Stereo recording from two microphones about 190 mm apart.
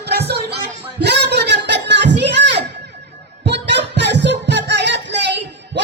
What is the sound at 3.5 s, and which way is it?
Music, 65° right (ahead or behind).